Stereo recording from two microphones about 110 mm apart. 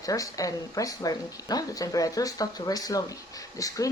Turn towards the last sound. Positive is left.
turn(degrees=30)  # may be behind; listen again after turning